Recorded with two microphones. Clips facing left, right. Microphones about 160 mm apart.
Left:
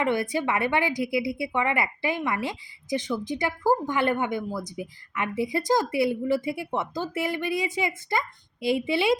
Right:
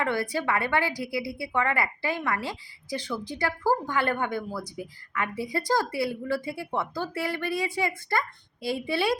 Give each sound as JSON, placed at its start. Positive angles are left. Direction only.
{"t": 0.0, "sound": "a woman's voice", "side_deg": 20}